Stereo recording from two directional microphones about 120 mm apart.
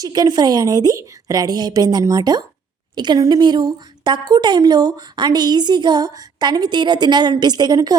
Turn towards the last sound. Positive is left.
turn(degrees=-35)  # may be behind; listen again after turning